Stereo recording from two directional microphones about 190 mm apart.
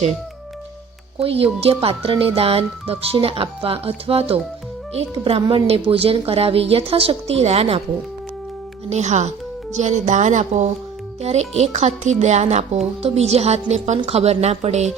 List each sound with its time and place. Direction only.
1.2 s speech: 30° right (ahead or behind)
8.9 s speech: 35° right (ahead or behind)